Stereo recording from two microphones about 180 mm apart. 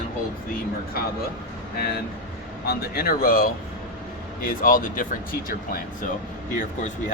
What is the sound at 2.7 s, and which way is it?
Speech, 55° left (ahead or behind).